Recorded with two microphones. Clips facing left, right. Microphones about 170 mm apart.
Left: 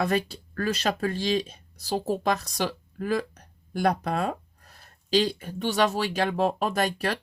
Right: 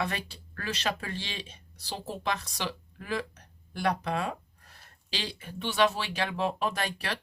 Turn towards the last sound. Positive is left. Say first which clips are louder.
# left 6 dB
turn(degrees=45)  # may be behind; listen again after turning